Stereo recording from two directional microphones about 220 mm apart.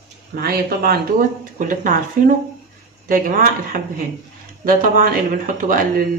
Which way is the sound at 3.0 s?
40° right (ahead or behind).